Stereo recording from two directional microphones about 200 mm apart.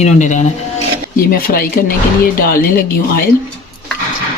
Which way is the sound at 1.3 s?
50° left (ahead or behind).